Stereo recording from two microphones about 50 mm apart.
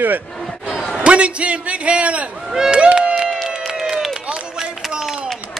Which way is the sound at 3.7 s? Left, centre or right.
Centre.